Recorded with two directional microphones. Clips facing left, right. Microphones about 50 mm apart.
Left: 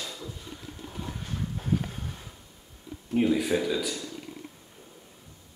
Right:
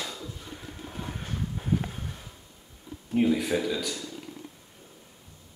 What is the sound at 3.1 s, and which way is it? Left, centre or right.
Speech, centre.